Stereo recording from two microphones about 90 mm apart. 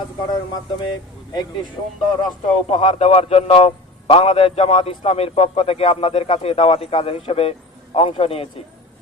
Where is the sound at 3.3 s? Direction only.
90° left.